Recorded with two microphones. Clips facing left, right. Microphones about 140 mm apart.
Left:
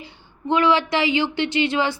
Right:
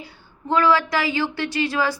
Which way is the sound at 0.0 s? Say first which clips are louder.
Left 4 dB; 20° left (ahead or behind).